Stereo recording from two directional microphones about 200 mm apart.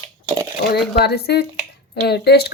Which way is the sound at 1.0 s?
55° left (ahead or behind).